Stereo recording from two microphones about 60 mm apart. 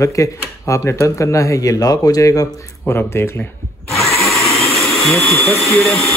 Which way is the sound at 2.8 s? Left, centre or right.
Left.